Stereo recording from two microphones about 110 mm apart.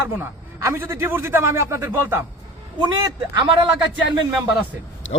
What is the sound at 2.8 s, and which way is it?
Speech, 45° right (ahead or behind).